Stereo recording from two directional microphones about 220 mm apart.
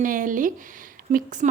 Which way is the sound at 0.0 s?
35° right (ahead or behind).